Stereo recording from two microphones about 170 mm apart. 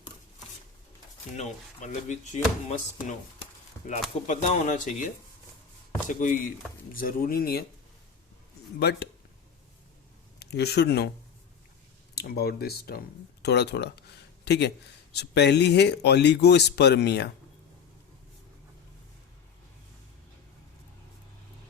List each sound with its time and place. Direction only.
1.4 s speech: 45° left (ahead or behind)
4.3 s speech: 45° left (ahead or behind)
6.1 s speech: 50° left (ahead or behind); by 7.6 s 65° left (ahead or behind)
8.8 s speech: 75° left (ahead or behind)
10.4 s speech: 75° left (ahead or behind)
12.1 s speech: 65° left (ahead or behind)
13.4 s speech: 80° left